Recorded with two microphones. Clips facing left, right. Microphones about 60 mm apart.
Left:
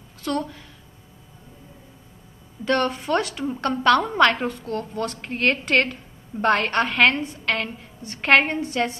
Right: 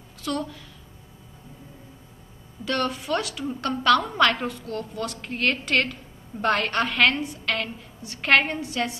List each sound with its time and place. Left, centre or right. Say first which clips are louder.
0.2 s a woman's voice: left 3 dB; left
2.6 s a woman's voice: left 4 dB; left
8.5 s speech: left 4 dB; left